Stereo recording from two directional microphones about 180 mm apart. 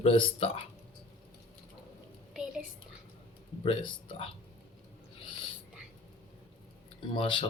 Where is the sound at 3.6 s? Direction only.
30° left (ahead or behind).